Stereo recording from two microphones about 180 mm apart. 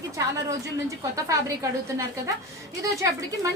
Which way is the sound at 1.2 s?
20° right (ahead or behind).